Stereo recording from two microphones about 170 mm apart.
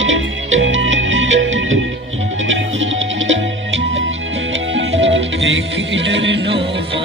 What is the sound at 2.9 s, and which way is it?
Music, 90° right.